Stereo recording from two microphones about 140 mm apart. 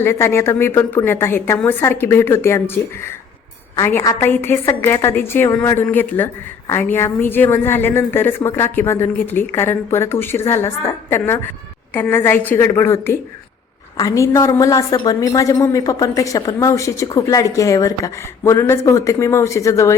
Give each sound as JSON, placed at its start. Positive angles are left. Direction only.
{"t": 0.0, "sound": "a woman's voice", "side_deg": 15}